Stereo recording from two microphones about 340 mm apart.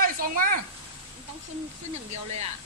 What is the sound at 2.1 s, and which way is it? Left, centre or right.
Speech, centre.